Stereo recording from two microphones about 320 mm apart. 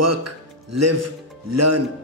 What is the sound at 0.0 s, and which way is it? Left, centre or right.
Speech, right.